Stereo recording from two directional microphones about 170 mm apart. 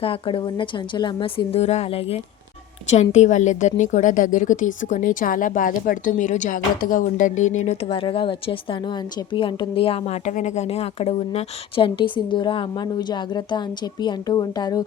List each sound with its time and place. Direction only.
0.0 s a woman's voice: 30° left (ahead or behind)